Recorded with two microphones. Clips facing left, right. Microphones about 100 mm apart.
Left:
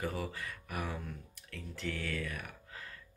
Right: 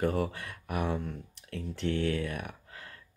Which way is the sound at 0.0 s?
65° right (ahead or behind).